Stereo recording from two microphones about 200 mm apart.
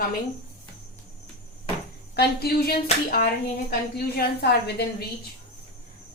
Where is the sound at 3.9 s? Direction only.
55° left (ahead or behind).